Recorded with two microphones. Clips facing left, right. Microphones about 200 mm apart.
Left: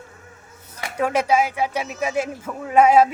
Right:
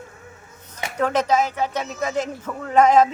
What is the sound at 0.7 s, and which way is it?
Speech, 10° left (ahead or behind).